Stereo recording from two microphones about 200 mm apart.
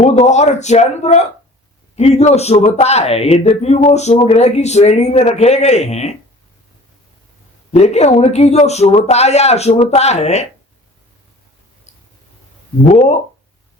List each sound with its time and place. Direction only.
0.0 s speech: 35° left (ahead or behind)
7.8 s speech: 35° left (ahead or behind)